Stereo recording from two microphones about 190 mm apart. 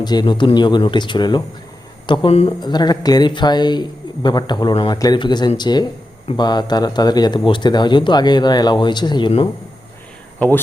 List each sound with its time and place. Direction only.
0.0 s speech: 20° left (ahead or behind)
2.6 s speech: 20° left (ahead or behind)